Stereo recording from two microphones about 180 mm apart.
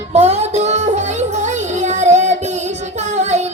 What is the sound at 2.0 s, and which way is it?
Child singing, 40° right (ahead or behind).